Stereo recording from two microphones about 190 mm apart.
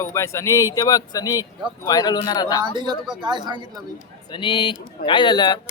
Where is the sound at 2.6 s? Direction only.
25° right (ahead or behind).